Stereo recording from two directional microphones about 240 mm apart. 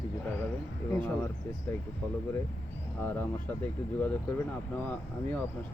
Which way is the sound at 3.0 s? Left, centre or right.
Centre.